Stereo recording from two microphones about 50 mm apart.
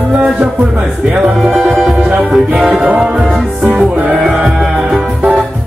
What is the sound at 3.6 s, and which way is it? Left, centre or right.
Music, right.